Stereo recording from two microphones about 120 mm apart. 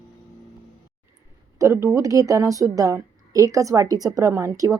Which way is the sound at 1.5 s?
25° right (ahead or behind).